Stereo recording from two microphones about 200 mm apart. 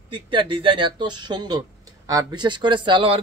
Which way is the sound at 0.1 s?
25° right (ahead or behind).